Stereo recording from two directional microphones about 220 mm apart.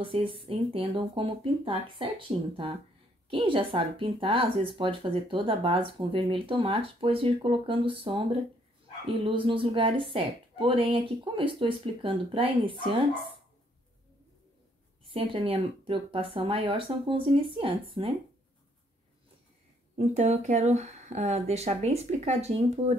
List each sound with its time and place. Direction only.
0.0 s speech: 25° right (ahead or behind)
15.0 s speech: 25° right (ahead or behind)
20.0 s speech: 30° right (ahead or behind)